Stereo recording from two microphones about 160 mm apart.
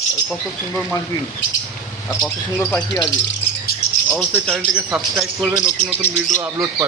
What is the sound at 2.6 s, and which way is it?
Speech, 5° left (ahead or behind).